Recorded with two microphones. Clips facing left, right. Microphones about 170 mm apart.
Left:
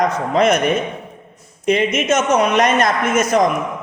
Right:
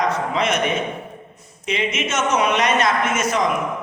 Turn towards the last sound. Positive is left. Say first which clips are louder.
# left 4 dB
turn(degrees=45)  # may be behind; listen again after turning